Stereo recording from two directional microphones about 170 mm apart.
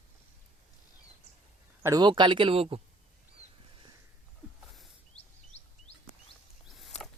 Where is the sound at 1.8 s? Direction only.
25° right (ahead or behind).